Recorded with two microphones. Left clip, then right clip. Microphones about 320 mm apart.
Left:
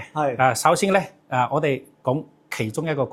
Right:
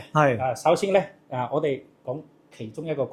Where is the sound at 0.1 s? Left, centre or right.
Right.